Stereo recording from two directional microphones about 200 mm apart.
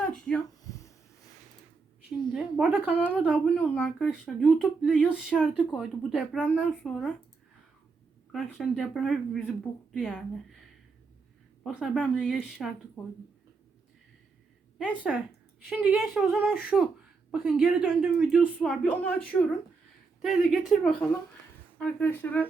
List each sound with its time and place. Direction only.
0.0 s a sound: 5° left (ahead or behind)
0.6 s a sound: 15° left (ahead or behind)
2.3 s speech: 5° right (ahead or behind)
3.1 s speech: 5° left (ahead or behind)
8.3 s speech: centre (ahead or behind)
11.6 s speech: centre (ahead or behind)
15.1 s speech: centre (ahead or behind)